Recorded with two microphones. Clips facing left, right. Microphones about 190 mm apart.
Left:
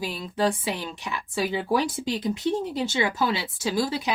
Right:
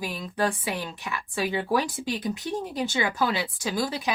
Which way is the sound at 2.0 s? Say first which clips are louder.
Left 4 dB; 25° left (ahead or behind).